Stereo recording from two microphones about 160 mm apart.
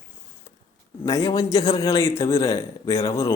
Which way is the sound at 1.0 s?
20° left (ahead or behind).